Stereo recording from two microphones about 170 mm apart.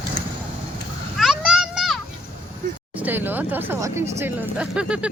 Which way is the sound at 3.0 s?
10° right (ahead or behind).